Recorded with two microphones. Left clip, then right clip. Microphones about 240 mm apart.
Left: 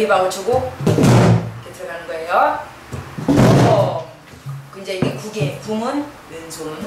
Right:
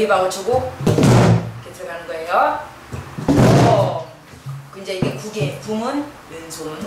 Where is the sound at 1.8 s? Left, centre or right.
Centre.